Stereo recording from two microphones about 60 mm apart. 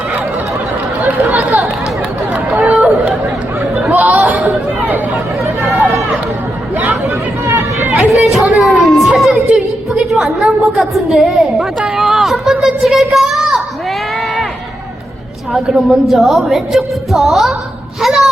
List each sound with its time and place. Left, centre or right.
1.3 s chatter: right
2.7 s chatter: centre
3.9 s chatter: right
6.7 s chatter: right
7.1 s chatter: right
7.9 s chatter: centre
8.5 s a sound: centre
15.6 s a woman's voice: centre
18.0 s a sound: centre